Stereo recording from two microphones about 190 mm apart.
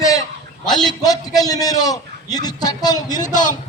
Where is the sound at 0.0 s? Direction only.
20° left (ahead or behind).